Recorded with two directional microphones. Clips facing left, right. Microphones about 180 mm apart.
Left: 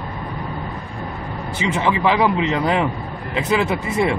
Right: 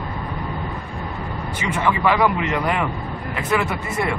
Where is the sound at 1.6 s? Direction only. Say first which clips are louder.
Left 1 dB; 25° left (ahead or behind).